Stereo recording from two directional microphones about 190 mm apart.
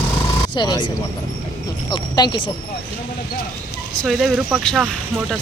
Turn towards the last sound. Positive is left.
turn(degrees=0)  # may be behind; listen again after turning